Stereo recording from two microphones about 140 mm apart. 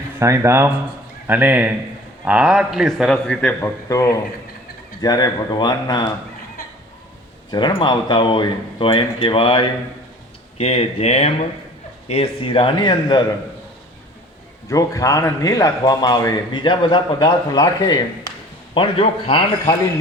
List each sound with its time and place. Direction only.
0.2 s a man's voice: 20° right (ahead or behind); by 3.5 s 5° left (ahead or behind)
3.6 s a man's voice: 20° left (ahead or behind)
7.5 s speech: 30° left (ahead or behind)
14.7 s a man's voice: 25° left (ahead or behind)
18.7 s speech: 40° left (ahead or behind)